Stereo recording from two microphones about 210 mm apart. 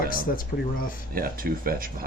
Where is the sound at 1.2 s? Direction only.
45° right (ahead or behind).